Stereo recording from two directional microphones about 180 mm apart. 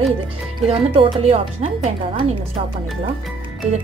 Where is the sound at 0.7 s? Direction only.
30° right (ahead or behind).